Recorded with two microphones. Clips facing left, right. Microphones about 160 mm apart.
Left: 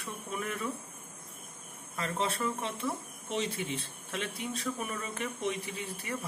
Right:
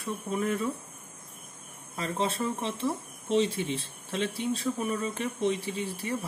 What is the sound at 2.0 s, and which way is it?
Speech, 25° right (ahead or behind).